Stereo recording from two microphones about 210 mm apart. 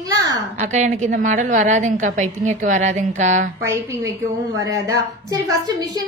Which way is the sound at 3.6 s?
15° right (ahead or behind).